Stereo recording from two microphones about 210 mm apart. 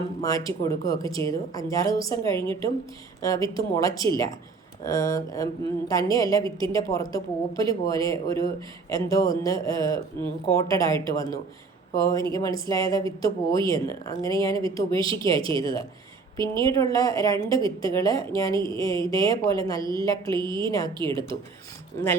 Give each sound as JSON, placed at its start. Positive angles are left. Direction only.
{"t": 0.2, "sound": "a woman's voice", "side_deg": 15}
{"t": 19.8, "sound": "a woman's voice", "side_deg": -20}
{"t": 20.6, "sound": "a woman's voice", "side_deg": 15}